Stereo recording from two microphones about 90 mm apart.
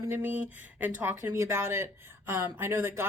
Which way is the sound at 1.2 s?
35° right (ahead or behind).